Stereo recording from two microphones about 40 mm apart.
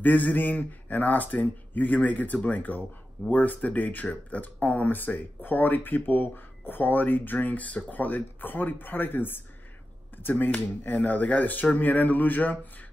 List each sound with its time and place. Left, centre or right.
0.0 s speech: left
10.9 s speech: left